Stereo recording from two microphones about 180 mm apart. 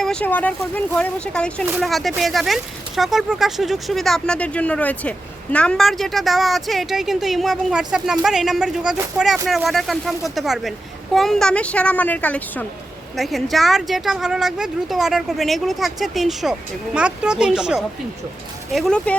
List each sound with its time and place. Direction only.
0.0 s speech: 5° left (ahead or behind)